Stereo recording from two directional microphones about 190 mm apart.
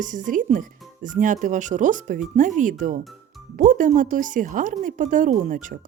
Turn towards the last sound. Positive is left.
turn(degrees=-40)  # may be behind; listen again after turning